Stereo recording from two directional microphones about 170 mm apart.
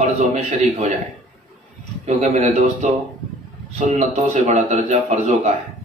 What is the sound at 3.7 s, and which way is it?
A man's voice, 45° right (ahead or behind).